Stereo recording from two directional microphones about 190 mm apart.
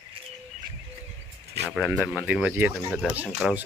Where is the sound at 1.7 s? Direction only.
5° right (ahead or behind).